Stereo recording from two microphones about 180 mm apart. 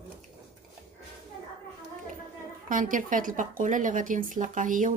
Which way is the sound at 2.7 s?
45° right (ahead or behind).